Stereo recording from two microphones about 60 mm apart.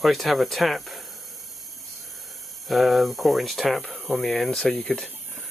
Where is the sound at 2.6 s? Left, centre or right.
Centre.